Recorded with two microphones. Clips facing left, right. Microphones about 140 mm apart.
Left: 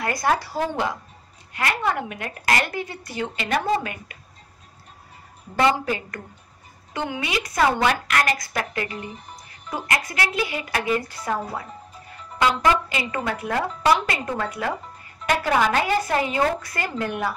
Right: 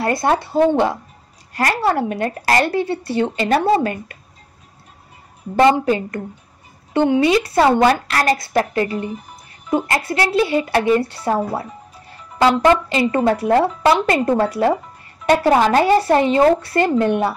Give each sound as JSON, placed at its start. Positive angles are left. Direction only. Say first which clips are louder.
{"t": 0.0, "sound": "speech", "louder": "right 5 dB", "side_deg": -30}
{"t": 1.5, "sound": "a woman's voice", "louder": "right 6 dB", "side_deg": -40}
{"t": 5.7, "sound": "a woman's voice", "louder": "right 7 dB", "side_deg": -25}